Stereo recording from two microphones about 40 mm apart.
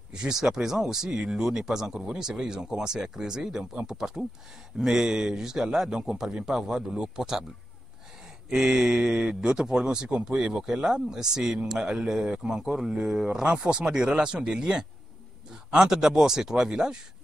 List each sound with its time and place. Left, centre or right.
0.1 s a man's voice: centre
8.5 s a man's voice: centre